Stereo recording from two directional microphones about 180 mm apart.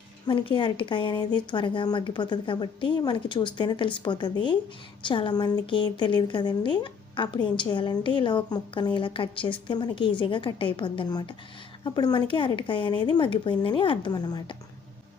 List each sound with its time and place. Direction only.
0.3 s speech: 25° left (ahead or behind)